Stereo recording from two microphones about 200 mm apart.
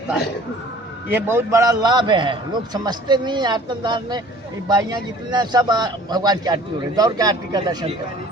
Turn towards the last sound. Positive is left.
turn(degrees=-20)  # may be behind; listen again after turning